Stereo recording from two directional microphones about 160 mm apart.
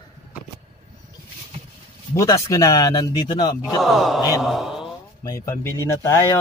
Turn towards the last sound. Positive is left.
turn(degrees=20)  # may be behind; listen again after turning